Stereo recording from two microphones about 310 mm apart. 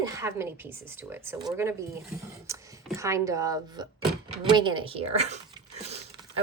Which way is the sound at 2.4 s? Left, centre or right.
Centre.